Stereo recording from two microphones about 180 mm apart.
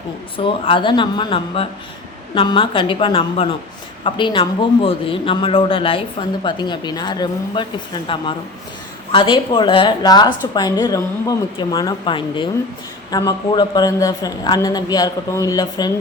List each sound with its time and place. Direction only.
0.3 s a man's voice: 30° left (ahead or behind)